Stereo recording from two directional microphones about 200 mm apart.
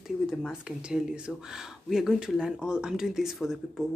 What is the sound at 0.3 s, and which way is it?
Speech, 5° right (ahead or behind).